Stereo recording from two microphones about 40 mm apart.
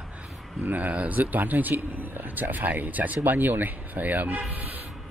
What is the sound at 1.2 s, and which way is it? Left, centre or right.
A man's voice, right.